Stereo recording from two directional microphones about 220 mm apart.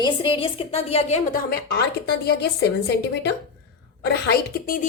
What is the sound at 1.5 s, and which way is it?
A woman's voice, 50° left (ahead or behind).